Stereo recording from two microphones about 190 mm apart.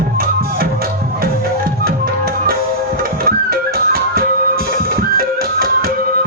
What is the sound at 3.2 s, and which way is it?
Music, 55° right (ahead or behind).